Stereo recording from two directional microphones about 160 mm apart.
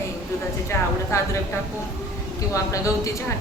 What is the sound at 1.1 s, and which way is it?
Speech, 15° left (ahead or behind).